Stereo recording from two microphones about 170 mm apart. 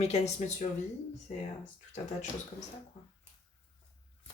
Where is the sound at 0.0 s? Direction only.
40° left (ahead or behind).